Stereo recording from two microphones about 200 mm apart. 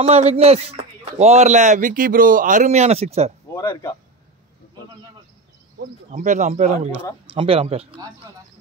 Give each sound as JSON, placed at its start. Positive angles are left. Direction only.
{"t": 0.0, "sound": "a man's voice", "side_deg": -30}
{"t": 3.5, "sound": "speech", "side_deg": 20}
{"t": 6.1, "sound": "a man's voice", "side_deg": -40}